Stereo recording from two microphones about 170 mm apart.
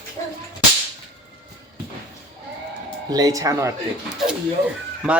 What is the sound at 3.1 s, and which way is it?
Speech, 20° right (ahead or behind).